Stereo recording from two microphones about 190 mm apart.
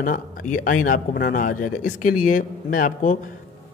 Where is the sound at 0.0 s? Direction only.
45° left (ahead or behind).